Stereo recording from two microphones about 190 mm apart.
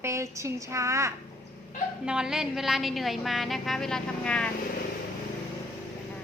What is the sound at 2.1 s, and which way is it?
A woman's voice, 5° right (ahead or behind).